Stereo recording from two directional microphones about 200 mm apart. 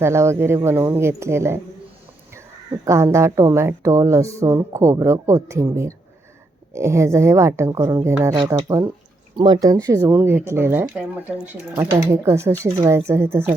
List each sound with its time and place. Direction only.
0.0 s speech: 15° right (ahead or behind)
2.8 s speech: 15° right (ahead or behind)